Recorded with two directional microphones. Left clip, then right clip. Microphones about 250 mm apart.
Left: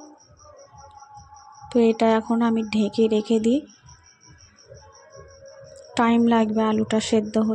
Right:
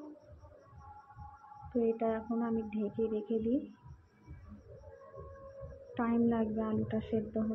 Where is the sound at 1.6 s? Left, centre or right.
Left.